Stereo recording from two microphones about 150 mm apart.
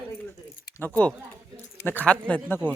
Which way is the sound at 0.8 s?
10° left (ahead or behind).